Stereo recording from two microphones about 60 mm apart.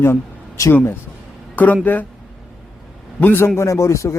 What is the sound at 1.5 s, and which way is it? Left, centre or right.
Speech, left.